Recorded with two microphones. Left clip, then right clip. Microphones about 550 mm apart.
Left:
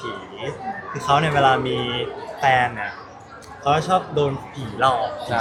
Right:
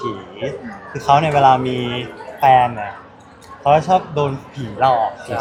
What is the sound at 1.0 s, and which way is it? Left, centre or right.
A man's voice, right.